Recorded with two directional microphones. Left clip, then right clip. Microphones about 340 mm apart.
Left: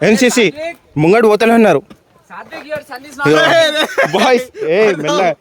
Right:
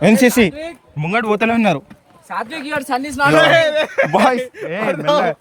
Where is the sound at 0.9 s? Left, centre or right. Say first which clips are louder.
Left 8 dB; centre.